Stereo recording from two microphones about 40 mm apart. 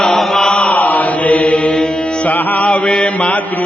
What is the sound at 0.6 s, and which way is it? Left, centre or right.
Mantra, left.